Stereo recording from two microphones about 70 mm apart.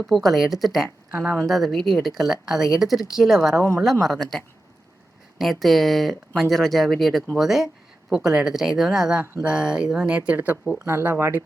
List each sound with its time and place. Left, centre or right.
0.0 s speech: centre; by 11.4 s right